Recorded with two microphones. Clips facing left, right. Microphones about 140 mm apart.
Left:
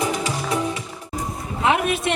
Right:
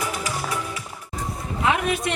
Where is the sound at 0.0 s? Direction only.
25° left (ahead or behind).